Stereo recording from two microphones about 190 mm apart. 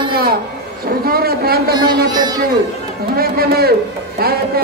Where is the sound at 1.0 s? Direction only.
55° right (ahead or behind).